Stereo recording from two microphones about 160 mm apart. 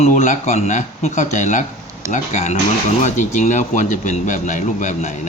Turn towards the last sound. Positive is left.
turn(degrees=50)  # may be behind; listen again after turning